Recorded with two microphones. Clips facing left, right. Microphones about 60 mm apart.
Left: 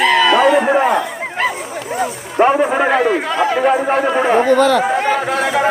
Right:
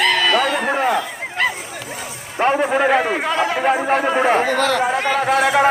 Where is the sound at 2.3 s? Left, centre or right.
Centre.